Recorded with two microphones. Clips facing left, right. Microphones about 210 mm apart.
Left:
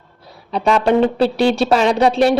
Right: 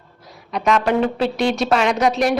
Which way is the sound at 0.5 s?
30° left (ahead or behind).